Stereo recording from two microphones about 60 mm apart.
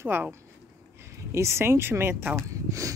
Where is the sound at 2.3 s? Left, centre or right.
Right.